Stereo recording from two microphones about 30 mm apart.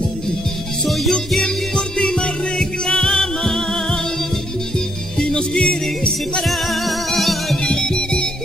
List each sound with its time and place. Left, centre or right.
0.8 s music: centre
2.0 s music: left
5.2 s music: left
6.4 s music: centre
7.6 s music: left